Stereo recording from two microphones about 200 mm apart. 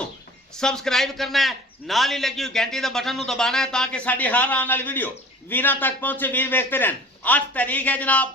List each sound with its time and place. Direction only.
0.5 s a man's voice: 5° left (ahead or behind)